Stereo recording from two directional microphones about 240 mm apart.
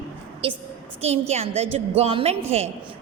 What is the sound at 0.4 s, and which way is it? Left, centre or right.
A woman's voice, right.